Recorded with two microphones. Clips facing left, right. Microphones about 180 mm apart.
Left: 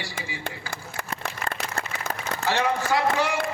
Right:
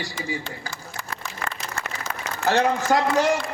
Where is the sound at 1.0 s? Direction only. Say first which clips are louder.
Left 2 dB; 55° left (ahead or behind).